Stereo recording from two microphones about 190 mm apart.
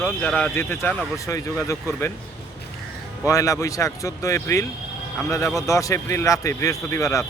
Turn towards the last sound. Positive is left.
turn(degrees=15)  # may be behind; listen again after turning